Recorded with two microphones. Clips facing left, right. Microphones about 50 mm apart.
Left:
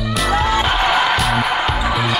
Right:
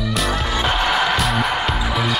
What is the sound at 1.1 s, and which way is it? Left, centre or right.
Music, centre.